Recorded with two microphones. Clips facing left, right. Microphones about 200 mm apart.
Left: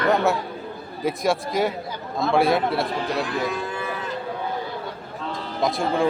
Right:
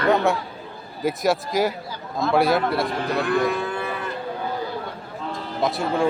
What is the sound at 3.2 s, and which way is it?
Moo, 60° right (ahead or behind).